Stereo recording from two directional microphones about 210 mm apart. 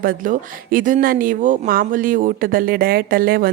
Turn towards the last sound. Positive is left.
turn(degrees=-45)  # may be behind; listen again after turning